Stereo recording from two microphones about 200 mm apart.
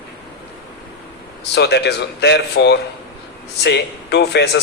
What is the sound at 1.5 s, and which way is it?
A man's voice, 60° left (ahead or behind).